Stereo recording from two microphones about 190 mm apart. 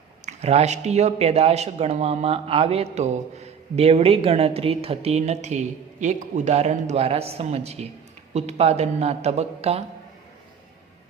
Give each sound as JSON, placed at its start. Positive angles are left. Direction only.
{"t": 0.3, "sound": "speech", "side_deg": -35}